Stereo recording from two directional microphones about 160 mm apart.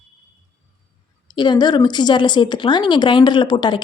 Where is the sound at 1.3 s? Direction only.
25° left (ahead or behind).